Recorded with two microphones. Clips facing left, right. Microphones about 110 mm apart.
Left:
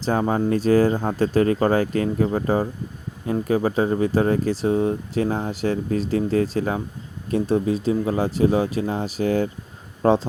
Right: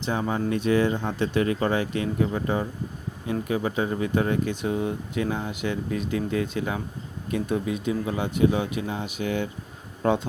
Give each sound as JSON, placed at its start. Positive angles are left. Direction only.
{"t": 0.0, "sound": "speech", "side_deg": 40}